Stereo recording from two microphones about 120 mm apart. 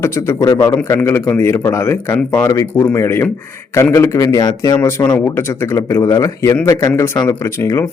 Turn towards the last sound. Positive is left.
turn(degrees=20)  # may be behind; listen again after turning